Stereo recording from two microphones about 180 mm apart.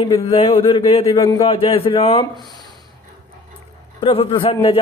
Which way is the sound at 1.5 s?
30° left (ahead or behind).